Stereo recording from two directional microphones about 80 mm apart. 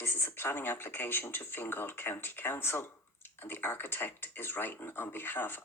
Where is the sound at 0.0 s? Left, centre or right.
Left.